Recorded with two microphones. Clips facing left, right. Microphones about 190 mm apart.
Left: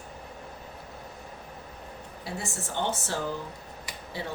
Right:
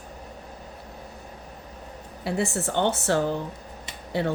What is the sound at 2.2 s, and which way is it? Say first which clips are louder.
Speech: right 10 dB; 65° right (ahead or behind).